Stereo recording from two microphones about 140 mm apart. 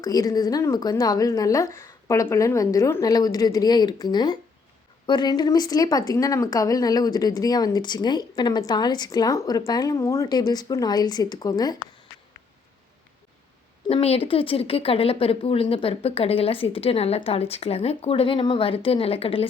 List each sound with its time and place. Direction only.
0.0 s speech: 25° left (ahead or behind)
13.9 s speech: 45° left (ahead or behind)